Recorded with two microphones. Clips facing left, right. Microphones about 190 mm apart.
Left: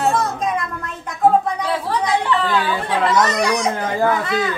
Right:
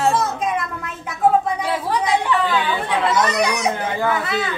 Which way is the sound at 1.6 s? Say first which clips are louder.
Even; 15° right (ahead or behind).